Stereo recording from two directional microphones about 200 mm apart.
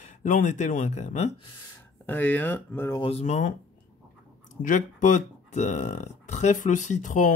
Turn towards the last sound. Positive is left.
turn(degrees=40)  # may be behind; listen again after turning